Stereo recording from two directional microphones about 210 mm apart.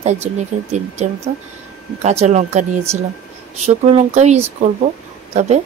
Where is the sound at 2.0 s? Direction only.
35° right (ahead or behind).